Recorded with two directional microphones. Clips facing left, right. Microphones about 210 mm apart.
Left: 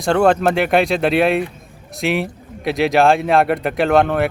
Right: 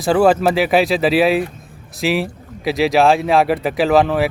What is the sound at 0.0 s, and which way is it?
Speech, 5° right (ahead or behind).